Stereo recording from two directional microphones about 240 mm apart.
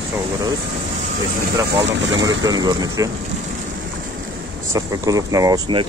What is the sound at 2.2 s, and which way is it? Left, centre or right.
Speech, centre.